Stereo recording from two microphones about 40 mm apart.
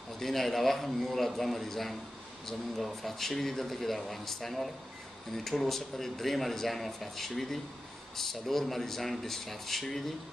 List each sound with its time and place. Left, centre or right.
0.2 s speech: centre